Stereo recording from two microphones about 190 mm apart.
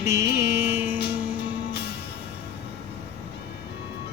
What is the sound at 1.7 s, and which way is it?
Music, 60° left (ahead or behind).